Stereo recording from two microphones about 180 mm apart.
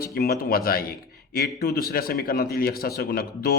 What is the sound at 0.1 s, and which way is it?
Speech, 60° left (ahead or behind).